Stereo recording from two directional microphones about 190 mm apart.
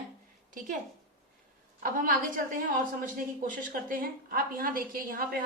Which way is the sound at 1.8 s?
45° right (ahead or behind).